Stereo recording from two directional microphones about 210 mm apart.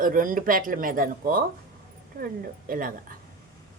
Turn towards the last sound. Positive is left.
turn(degrees=-40)  # may be behind; listen again after turning